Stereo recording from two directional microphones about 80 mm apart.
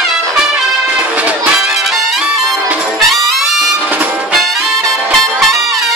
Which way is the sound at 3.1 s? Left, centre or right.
Centre.